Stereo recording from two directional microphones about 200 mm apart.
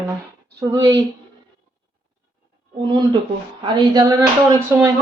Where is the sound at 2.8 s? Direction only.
25° right (ahead or behind).